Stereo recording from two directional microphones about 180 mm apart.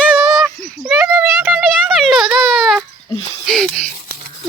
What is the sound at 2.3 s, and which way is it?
Speech, centre (ahead or behind).